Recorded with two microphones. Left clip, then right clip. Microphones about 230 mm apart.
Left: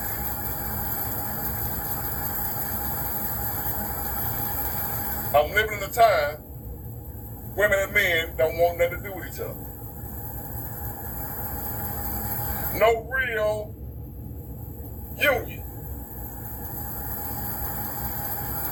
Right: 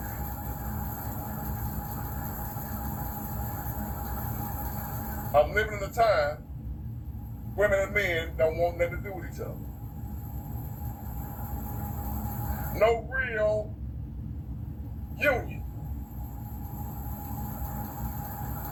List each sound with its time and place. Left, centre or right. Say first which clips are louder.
0.0 s train: left 5 dB; left
7.5 s a man's voice: left 4 dB; left
11.2 s vehicle: left 4 dB; left
15.2 s a man's voice: left 4 dB; left
16.7 s train: left 4 dB; left